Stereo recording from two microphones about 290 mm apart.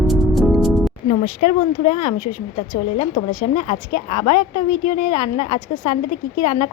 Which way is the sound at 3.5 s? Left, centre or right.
Left.